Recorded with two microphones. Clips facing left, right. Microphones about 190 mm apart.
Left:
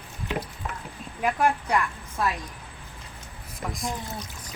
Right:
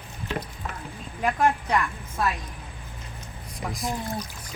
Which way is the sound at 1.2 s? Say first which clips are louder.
Right 1 dB; 5° left (ahead or behind).